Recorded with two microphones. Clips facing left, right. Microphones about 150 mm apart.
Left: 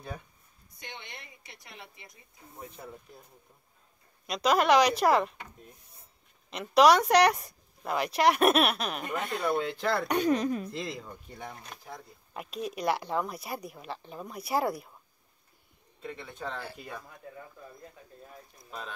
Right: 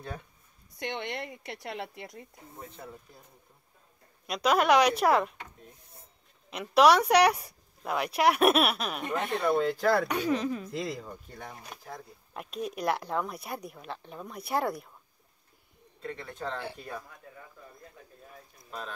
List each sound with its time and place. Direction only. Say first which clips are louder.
0.7 s a woman's voice: right 12 dB; 70° right (ahead or behind)
2.6 s speech: left 1 dB; 15° left (ahead or behind)
4.3 s speech: even; 5° right (ahead or behind)
6.5 s speech: even; centre (ahead or behind)
10.1 s speech: left 2 dB; 15° left (ahead or behind)
10.7 s speech: right 2 dB; centre (ahead or behind)
16.0 s speech: right 2 dB; 5° left (ahead or behind)
18.7 s speech: right 1 dB; centre (ahead or behind)